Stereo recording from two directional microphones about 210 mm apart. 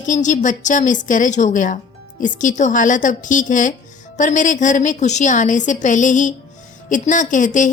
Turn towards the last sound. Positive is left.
turn(degrees=35)  # may be behind; listen again after turning